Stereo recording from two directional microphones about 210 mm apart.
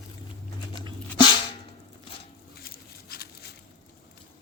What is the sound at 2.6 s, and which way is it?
Patter, 45° left (ahead or behind).